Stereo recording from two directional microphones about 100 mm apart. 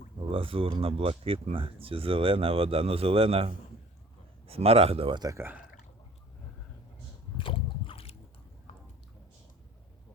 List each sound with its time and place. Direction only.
0.3 s speech: 65° right (ahead or behind)
5.3 s speech: 25° right (ahead or behind)
7.3 s a sound: 60° left (ahead or behind)